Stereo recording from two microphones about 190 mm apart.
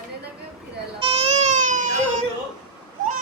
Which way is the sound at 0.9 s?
30° right (ahead or behind).